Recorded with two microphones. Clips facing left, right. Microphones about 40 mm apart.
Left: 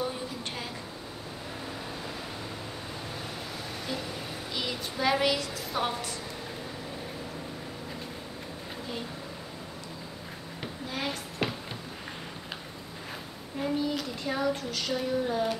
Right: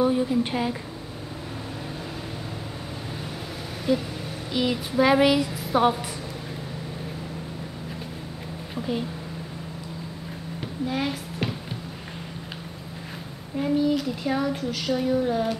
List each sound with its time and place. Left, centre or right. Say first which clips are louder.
0.0 s speech: right 12 dB; centre
3.9 s speech: right 12 dB; centre
10.9 s a woman's voice: right 5 dB; centre
13.6 s speech: right 7 dB; centre